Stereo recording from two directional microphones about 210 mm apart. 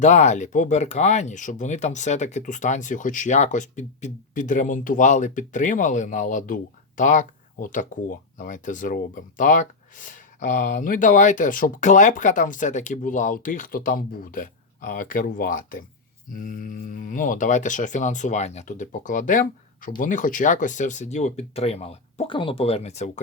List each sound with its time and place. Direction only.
0.0 s speech: 35° left (ahead or behind)